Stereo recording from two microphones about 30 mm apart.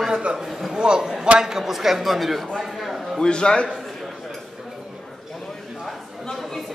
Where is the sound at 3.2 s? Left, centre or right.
Left.